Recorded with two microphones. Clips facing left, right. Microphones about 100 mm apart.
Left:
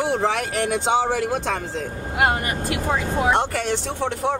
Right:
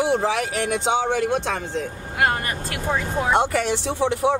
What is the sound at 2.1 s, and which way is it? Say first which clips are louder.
Speech: left 1 dB; 20° left (ahead or behind).